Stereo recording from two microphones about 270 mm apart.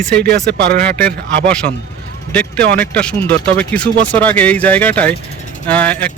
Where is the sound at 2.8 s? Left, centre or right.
Centre.